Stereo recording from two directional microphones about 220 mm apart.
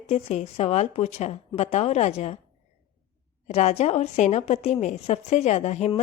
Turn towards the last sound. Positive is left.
turn(degrees=30)  # may be behind; listen again after turning